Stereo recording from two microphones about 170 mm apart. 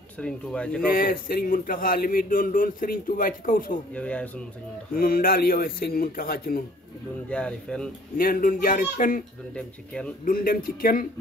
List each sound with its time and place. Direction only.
0.2 s speech: 5° left (ahead or behind)
0.8 s speech: 55° left (ahead or behind)
3.9 s speech: 10° left (ahead or behind)
4.9 s speech: 60° left (ahead or behind)
7.2 s speech: 5° left (ahead or behind)
8.2 s speech: 55° left (ahead or behind)
9.6 s speech: 5° left (ahead or behind)
10.2 s speech: 55° left (ahead or behind)